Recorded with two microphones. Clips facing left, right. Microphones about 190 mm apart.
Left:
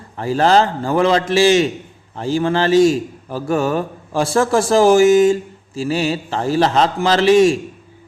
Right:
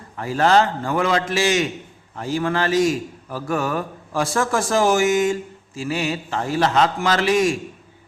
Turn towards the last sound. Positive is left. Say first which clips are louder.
# left 7 dB
turn(degrees=30)  # may be behind; listen again after turning